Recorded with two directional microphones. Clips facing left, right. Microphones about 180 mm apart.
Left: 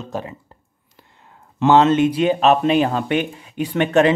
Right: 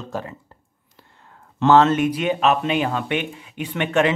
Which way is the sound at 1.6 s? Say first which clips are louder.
Left 2 dB; 15° left (ahead or behind).